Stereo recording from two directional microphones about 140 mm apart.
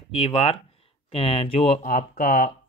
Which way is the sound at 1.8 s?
75° left (ahead or behind).